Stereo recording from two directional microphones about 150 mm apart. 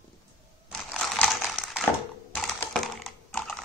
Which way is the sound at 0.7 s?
Centre (ahead or behind).